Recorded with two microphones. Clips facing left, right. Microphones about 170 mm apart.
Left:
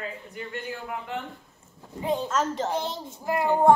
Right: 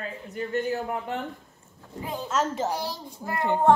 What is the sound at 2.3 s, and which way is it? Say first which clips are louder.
Speech: even; 10° right (ahead or behind).